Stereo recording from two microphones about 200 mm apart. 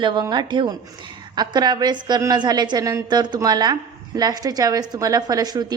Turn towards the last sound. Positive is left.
turn(degrees=-20)  # may be behind; listen again after turning